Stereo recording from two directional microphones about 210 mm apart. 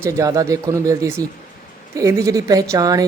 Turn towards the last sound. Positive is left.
turn(degrees=-15)  # may be behind; listen again after turning